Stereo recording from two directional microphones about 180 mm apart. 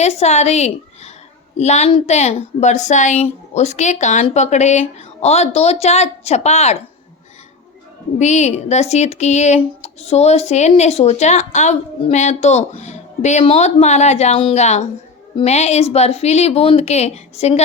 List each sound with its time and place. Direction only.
0.0 s a woman's voice: 35° left (ahead or behind)
8.2 s speech: 40° left (ahead or behind)